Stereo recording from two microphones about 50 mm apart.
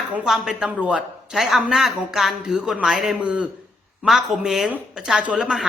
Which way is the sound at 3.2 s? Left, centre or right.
Right.